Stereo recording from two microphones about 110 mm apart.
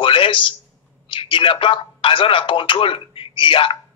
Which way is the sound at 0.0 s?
50° left (ahead or behind).